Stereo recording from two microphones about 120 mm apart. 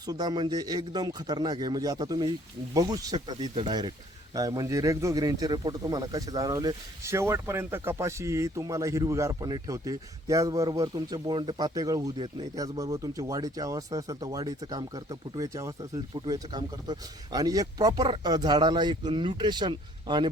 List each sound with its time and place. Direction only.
0.0 s speech: 35° right (ahead or behind)
3.5 s speech: 45° right (ahead or behind)
4.4 s speech: 30° right (ahead or behind)